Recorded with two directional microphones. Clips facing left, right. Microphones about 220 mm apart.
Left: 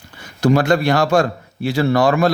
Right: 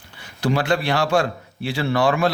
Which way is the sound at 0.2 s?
45° left (ahead or behind).